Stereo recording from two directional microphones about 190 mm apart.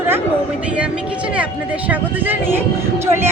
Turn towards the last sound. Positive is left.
turn(degrees=-15)  # may be behind; listen again after turning